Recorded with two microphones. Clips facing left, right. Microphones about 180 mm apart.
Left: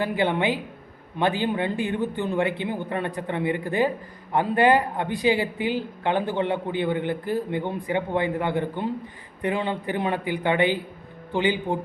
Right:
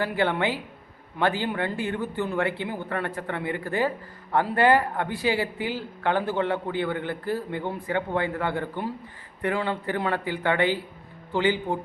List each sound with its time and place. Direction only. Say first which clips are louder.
0.0 s a man's voice: left 1 dB; 20° left (ahead or behind)